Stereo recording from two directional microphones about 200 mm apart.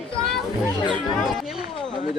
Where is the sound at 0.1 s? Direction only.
Centre (ahead or behind).